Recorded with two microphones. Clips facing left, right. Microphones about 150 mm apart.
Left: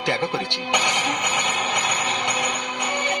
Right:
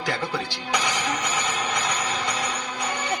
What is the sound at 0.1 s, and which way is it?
A man's voice, 20° left (ahead or behind).